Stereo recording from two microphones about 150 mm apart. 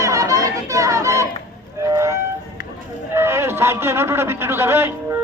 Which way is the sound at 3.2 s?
15° right (ahead or behind).